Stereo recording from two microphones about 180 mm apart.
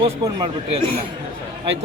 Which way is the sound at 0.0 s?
30° right (ahead or behind).